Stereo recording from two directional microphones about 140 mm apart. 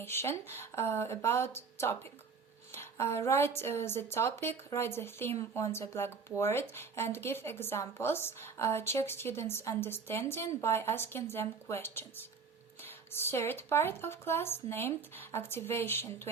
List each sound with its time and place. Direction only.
0.0 s a woman's voice: 15° left (ahead or behind)